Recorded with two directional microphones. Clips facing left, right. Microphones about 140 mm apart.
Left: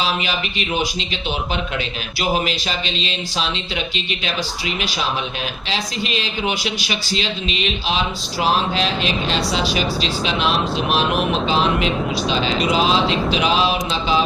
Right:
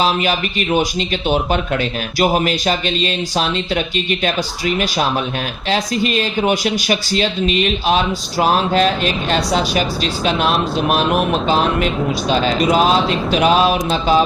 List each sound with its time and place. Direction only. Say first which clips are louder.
0.0 s speech: right 6 dB; 45° right (ahead or behind)
11.9 s speech: right 3 dB; centre (ahead or behind)
12.3 s speech: right 5 dB; 45° right (ahead or behind)